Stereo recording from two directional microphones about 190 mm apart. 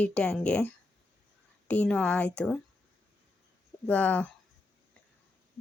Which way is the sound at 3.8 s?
10° left (ahead or behind).